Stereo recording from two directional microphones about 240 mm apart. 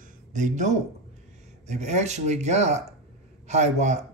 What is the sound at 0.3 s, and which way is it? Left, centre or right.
Speech, right.